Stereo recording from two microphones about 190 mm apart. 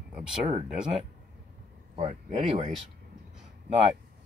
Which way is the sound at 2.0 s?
35° right (ahead or behind).